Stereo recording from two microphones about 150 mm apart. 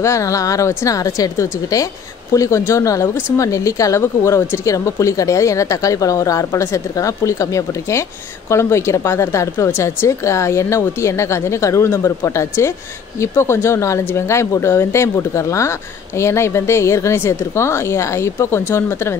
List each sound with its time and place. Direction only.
0.0 s speech: 20° left (ahead or behind)